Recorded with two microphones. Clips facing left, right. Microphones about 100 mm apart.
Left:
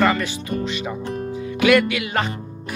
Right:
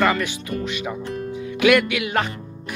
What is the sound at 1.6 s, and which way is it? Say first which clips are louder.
Music: even; 10° right (ahead or behind).